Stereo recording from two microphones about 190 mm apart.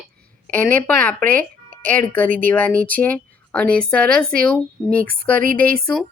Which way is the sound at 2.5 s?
10° left (ahead or behind).